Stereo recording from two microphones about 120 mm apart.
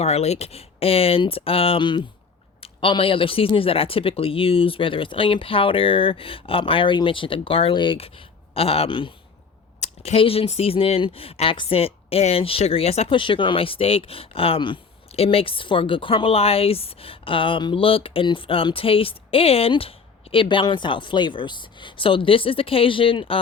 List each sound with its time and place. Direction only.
0.0 s speech: 60° left (ahead or behind); by 9.1 s 45° left (ahead or behind)
9.8 s speech: 60° left (ahead or behind)
13.1 s speech: 45° left (ahead or behind)